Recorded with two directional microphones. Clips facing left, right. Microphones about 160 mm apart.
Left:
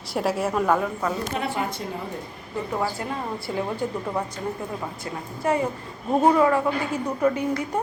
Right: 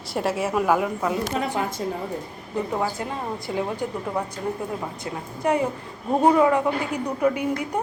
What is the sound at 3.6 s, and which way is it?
Speech, 15° right (ahead or behind).